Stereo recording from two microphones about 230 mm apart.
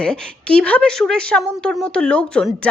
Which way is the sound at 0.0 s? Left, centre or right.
Centre.